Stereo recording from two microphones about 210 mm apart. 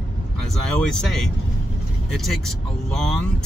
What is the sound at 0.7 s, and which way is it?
Speech, centre (ahead or behind).